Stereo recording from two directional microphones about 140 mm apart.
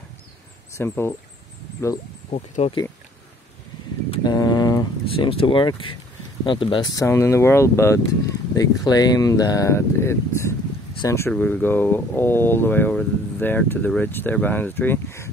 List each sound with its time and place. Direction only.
0.7 s speech: 20° left (ahead or behind)
2.3 s speech: 50° left (ahead or behind)
4.1 s mantra: 30° left (ahead or behind)
5.0 s speech: 40° left (ahead or behind)
7.0 s speech: 20° left (ahead or behind)